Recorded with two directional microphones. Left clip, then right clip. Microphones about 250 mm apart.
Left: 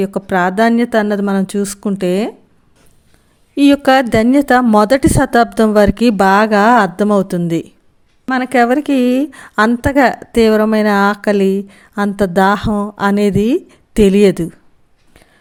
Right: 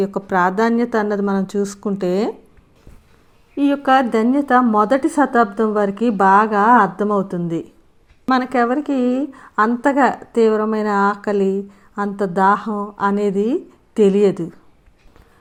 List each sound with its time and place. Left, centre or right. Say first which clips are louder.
0.0 s a woman's voice: left 2 dB; left
3.5 s a woman's voice: left 5 dB; left